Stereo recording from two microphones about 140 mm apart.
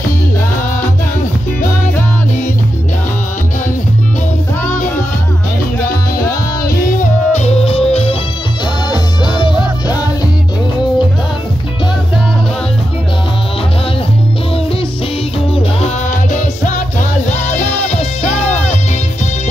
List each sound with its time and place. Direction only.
7.0 s music: 55° left (ahead or behind)
8.9 s music: 35° left (ahead or behind)
15.8 s music: 60° left (ahead or behind)
17.9 s music: 55° left (ahead or behind)